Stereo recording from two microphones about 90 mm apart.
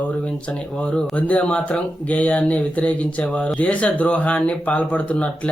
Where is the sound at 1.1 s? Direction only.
15° left (ahead or behind).